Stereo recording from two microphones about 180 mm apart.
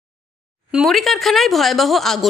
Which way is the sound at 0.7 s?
Centre (ahead or behind).